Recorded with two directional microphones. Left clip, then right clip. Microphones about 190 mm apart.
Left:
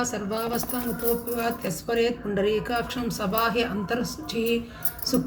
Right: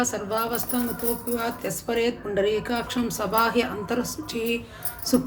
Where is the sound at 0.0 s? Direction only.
30° right (ahead or behind).